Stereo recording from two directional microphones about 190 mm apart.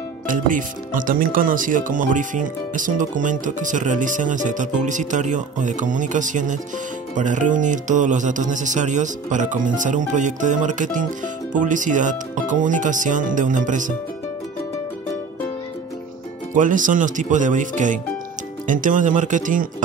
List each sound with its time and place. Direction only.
0.3 s speech: 45° right (ahead or behind)
16.5 s speech: 45° right (ahead or behind)